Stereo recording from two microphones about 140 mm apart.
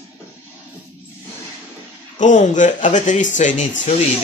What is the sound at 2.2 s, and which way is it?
Speech, 60° left (ahead or behind).